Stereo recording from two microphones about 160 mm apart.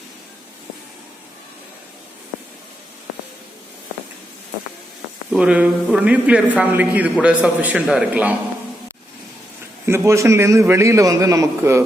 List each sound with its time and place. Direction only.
5.3 s a man's voice: 5° right (ahead or behind)
9.8 s a man's voice: 15° right (ahead or behind)